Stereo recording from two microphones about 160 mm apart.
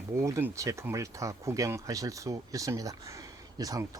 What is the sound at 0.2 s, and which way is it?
Speech, 15° right (ahead or behind).